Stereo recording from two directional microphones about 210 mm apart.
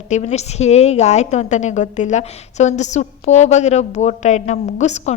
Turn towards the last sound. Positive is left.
turn(degrees=35)  # may be behind; listen again after turning